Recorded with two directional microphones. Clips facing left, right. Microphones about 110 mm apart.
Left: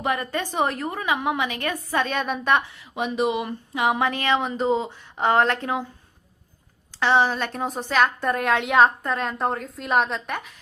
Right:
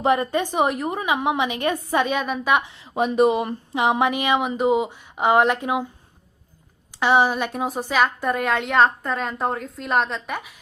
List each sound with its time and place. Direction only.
0.0 s a woman's voice: 25° right (ahead or behind)
2.1 s a woman's voice: centre (ahead or behind)
2.9 s speech: 40° right (ahead or behind)
3.8 s a woman's voice: 25° right (ahead or behind)
7.0 s a woman's voice: 15° right (ahead or behind)